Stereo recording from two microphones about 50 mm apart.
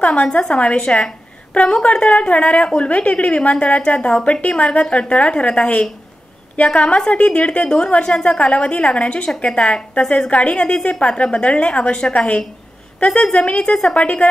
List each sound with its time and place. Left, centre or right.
0.0 s a woman's voice: left